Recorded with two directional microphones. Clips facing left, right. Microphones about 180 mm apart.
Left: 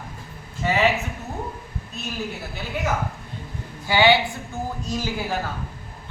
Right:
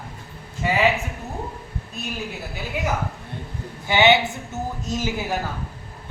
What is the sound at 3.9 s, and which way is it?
Speech, 20° right (ahead or behind).